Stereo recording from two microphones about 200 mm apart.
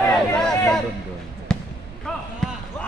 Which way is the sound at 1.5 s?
5° left (ahead or behind).